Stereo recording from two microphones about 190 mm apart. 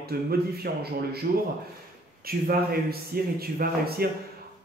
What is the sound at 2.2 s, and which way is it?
A man's voice, 50° right (ahead or behind).